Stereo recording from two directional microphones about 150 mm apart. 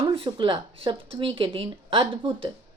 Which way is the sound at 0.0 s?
30° right (ahead or behind).